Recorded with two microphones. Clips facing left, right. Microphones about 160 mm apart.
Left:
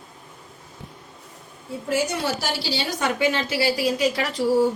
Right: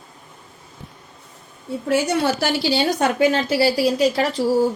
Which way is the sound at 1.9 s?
60° right (ahead or behind).